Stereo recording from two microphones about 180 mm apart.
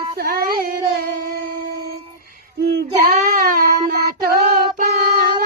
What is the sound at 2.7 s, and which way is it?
Child singing, 55° right (ahead or behind).